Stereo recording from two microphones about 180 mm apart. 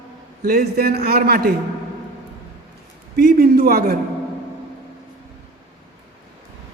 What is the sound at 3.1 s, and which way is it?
Speech, 60° right (ahead or behind).